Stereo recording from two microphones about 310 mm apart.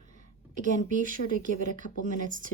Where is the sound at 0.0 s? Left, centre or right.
Right.